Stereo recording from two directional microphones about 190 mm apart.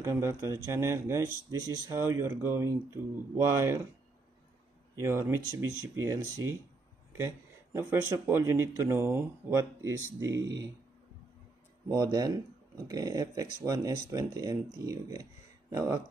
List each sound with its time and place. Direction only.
0.0 s speech: 15° right (ahead or behind)
4.9 s speech: 15° right (ahead or behind)
10.3 s speech: 70° right (ahead or behind)
11.9 s speech: 20° right (ahead or behind)